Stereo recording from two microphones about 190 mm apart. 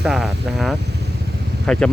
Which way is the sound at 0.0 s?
Centre (ahead or behind).